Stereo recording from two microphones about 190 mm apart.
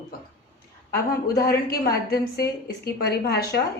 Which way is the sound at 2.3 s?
55° left (ahead or behind).